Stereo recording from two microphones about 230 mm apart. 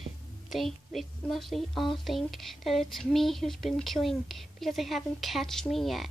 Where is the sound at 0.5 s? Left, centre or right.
Centre.